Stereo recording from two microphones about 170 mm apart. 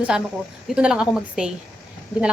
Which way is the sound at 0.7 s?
5° right (ahead or behind).